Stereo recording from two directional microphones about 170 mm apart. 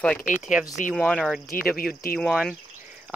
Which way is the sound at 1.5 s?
60° left (ahead or behind).